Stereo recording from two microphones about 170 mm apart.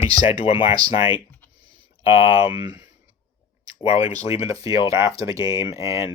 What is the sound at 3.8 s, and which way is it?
Speech, 35° left (ahead or behind).